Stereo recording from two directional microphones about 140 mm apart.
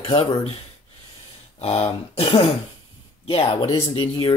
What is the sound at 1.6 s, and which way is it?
Speech, 45° left (ahead or behind).